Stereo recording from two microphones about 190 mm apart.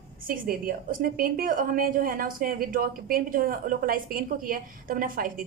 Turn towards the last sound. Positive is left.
turn(degrees=-45)  # may be behind; listen again after turning